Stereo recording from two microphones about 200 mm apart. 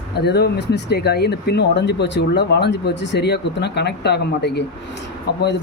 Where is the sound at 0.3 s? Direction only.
55° left (ahead or behind).